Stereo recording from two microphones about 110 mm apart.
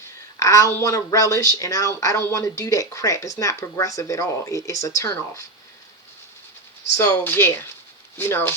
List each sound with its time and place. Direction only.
0.3 s a sound: 30° left (ahead or behind)
0.7 s speech: 25° left (ahead or behind)
7.1 s speech: 15° left (ahead or behind)